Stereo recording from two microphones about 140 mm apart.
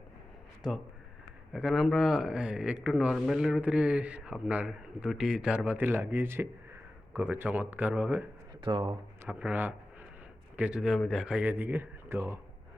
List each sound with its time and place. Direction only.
1.5 s speech: centre (ahead or behind)
8.6 s speech: 35° right (ahead or behind)
9.2 s speech: 10° right (ahead or behind)